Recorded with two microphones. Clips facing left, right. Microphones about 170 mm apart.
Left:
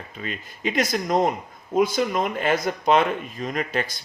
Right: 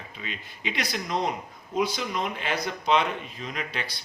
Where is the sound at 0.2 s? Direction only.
45° left (ahead or behind).